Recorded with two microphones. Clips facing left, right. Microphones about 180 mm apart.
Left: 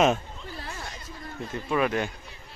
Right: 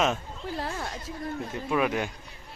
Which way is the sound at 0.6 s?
55° right (ahead or behind).